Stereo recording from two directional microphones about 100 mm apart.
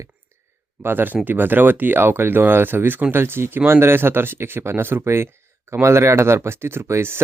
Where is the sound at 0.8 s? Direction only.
20° right (ahead or behind).